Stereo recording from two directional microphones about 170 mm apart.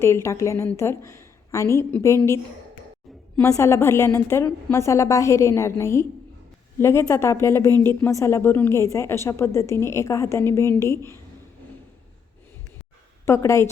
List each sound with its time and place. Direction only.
0.0 s a woman's voice: 15° left (ahead or behind)
3.4 s a woman's voice: 15° left (ahead or behind)
13.2 s a woman's voice: 15° left (ahead or behind)